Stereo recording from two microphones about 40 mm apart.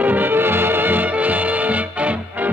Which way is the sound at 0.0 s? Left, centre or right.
Right.